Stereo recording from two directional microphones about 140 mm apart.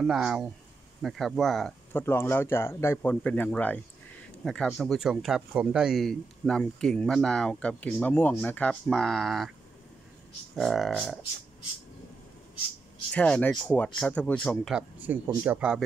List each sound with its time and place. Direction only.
0.0 s speech: 5° right (ahead or behind)
1.9 s speech: 15° left (ahead or behind)
10.5 s speech: centre (ahead or behind)
13.1 s speech: 5° left (ahead or behind)
14.7 s speech: 10° right (ahead or behind)